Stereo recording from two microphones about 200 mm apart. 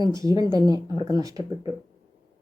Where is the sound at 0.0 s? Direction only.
15° right (ahead or behind).